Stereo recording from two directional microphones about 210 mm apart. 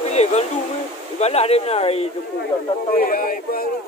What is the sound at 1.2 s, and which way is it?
Speech, 30° left (ahead or behind).